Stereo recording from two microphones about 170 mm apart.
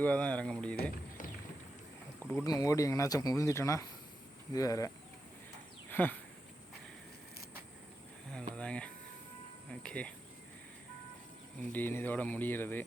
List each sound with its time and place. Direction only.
0.0 s speech: 10° left (ahead or behind)
2.3 s speech: 20° left (ahead or behind)
5.9 s speech: 10° left (ahead or behind)
8.3 s speech: 5° left (ahead or behind)
11.6 s speech: 10° left (ahead or behind)